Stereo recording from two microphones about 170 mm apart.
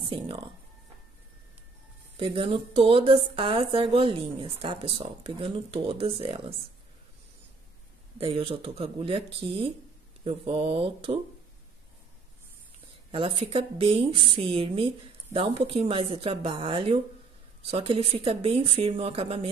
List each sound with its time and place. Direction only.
0.0 s speech: 30° right (ahead or behind)
2.1 s a woman's voice: 30° right (ahead or behind)
8.2 s a woman's voice: 30° right (ahead or behind)
13.1 s a woman's voice: 30° right (ahead or behind)